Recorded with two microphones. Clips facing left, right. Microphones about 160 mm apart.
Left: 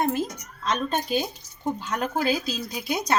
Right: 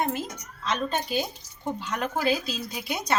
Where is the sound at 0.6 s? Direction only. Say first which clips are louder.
Left 2 dB; 45° left (ahead or behind).